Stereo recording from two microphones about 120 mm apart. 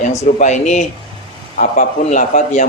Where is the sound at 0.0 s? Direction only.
80° left.